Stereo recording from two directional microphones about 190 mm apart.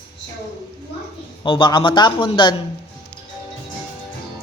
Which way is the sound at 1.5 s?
25° left (ahead or behind).